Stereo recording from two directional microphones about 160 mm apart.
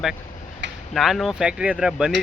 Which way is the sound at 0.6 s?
90° right.